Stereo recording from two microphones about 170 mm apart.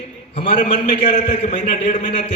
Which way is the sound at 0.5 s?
50° left (ahead or behind).